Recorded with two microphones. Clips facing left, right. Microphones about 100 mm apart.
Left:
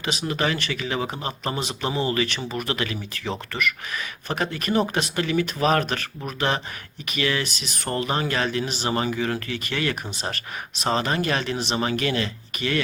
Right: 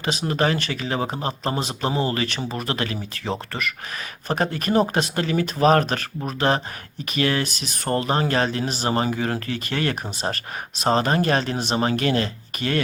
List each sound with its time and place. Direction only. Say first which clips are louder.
0.0 s speech: right 3 dB; 35° right (ahead or behind)